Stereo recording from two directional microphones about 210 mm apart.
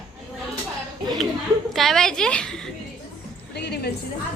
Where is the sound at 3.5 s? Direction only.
50° left (ahead or behind).